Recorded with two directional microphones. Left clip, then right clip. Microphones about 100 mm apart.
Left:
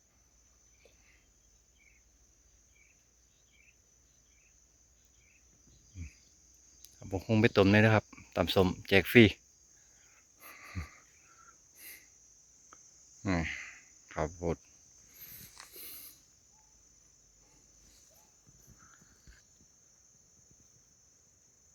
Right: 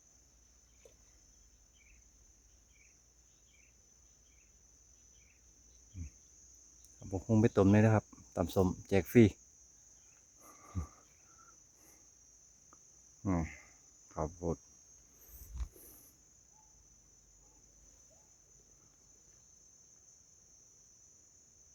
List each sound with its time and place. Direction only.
7.0 s a sound: 10° left (ahead or behind)
7.3 s speech: 10° right (ahead or behind)
10.5 s wheeze: 35° right (ahead or behind)
13.2 s cricket: 5° right (ahead or behind)
14.2 s speech: 5° left (ahead or behind)